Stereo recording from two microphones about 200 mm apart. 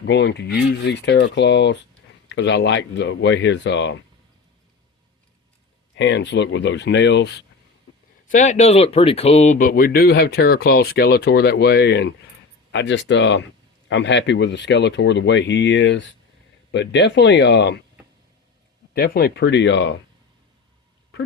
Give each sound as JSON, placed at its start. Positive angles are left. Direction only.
{"t": 0.0, "sound": "speech", "side_deg": 60}
{"t": 6.0, "sound": "speech", "side_deg": 65}
{"t": 8.3, "sound": "speech", "side_deg": 35}
{"t": 18.9, "sound": "speech", "side_deg": 50}